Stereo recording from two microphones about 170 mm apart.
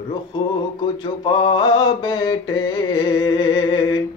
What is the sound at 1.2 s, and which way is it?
Male singing, 30° left (ahead or behind).